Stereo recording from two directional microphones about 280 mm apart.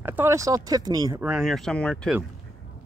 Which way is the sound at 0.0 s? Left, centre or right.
Centre.